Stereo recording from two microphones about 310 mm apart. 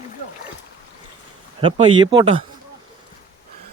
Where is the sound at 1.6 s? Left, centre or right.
Centre.